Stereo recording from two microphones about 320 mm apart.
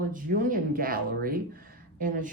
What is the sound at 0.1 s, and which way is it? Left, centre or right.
A man's voice, right.